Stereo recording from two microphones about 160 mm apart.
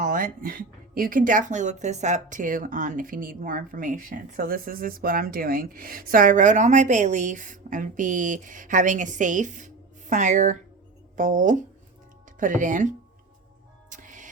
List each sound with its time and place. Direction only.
0.0 s speech: 55° right (ahead or behind)
13.9 s music: 55° right (ahead or behind)